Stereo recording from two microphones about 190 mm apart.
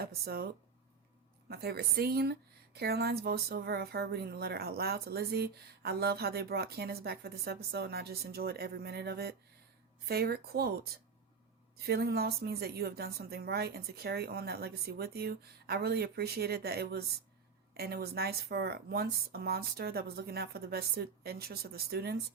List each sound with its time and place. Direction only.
0.0 s speech: 55° right (ahead or behind)
1.5 s a woman's voice: 55° right (ahead or behind)
11.9 s a woman's voice: 55° right (ahead or behind)